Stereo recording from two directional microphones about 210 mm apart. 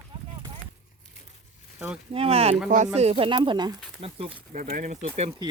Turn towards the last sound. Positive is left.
turn(degrees=-30)  # may be behind; listen again after turning